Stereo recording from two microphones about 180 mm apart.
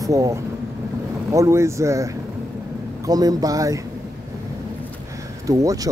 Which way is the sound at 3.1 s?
20° right (ahead or behind).